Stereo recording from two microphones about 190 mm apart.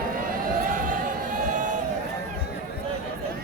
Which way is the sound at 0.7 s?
45° right (ahead or behind).